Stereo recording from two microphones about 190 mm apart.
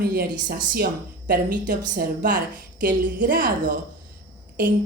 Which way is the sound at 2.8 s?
45° right (ahead or behind).